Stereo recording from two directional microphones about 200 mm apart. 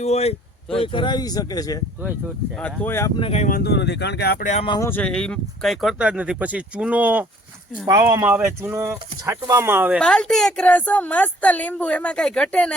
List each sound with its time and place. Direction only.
0.0 s speech: 30° left (ahead or behind)
2.6 s speech: 10° left (ahead or behind)
3.2 s speech: 30° left (ahead or behind)
3.6 s speech: 55° left (ahead or behind)
4.4 s speech: 35° left (ahead or behind)
4.7 s a woman's voice: 15° left (ahead or behind); by 10.0 s 10° right (ahead or behind)
10.0 s a woman's voice: 5° left (ahead or behind)